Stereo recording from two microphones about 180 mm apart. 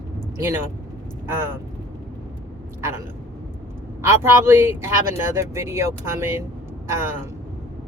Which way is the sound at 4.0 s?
15° right (ahead or behind).